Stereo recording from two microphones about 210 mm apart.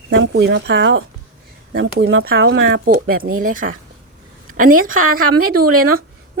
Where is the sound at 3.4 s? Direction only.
40° right (ahead or behind).